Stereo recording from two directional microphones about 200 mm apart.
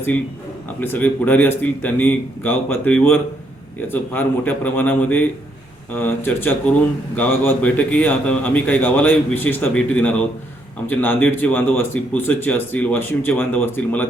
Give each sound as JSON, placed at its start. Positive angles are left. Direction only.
{"t": 0.8, "sound": "speech", "side_deg": 10}